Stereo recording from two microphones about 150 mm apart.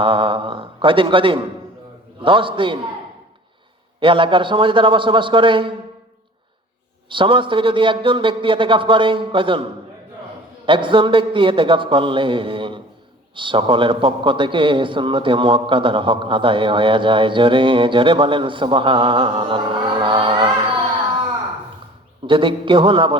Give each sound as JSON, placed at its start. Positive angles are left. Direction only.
{"t": 0.0, "sound": "a man's voice", "side_deg": -35}
{"t": 4.0, "sound": "a man's voice", "side_deg": -35}
{"t": 7.1, "sound": "a man's voice", "side_deg": -35}
{"t": 10.7, "sound": "a man's voice", "side_deg": -35}
{"t": 22.3, "sound": "a man's voice", "side_deg": -35}